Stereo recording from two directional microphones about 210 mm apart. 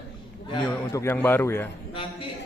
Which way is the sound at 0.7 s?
15° left (ahead or behind).